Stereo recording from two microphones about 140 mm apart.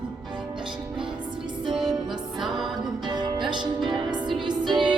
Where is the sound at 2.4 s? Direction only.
Centre (ahead or behind).